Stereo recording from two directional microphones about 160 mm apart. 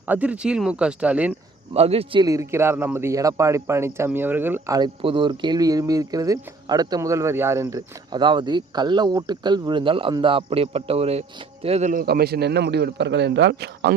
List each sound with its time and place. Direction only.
0.1 s speech: 10° right (ahead or behind)
1.7 s a man's voice: 40° right (ahead or behind)
2.2 s speech: 20° right (ahead or behind)
5.0 s speech: 30° right (ahead or behind)
11.9 s a man's voice: 70° right (ahead or behind); by 13.9 s 90° right